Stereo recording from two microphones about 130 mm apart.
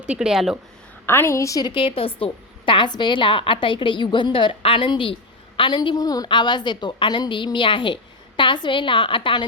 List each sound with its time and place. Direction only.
0.0 s speech: 5° right (ahead or behind)
1.0 s a woman's voice: 20° left (ahead or behind)
1.7 s a woman's voice: 45° left (ahead or behind)